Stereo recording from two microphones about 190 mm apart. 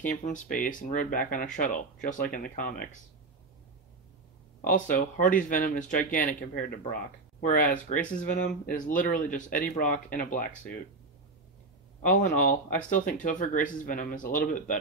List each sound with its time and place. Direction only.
0.0 s speech: 40° left (ahead or behind)
4.6 s speech: 45° left (ahead or behind)
12.1 s speech: 45° left (ahead or behind)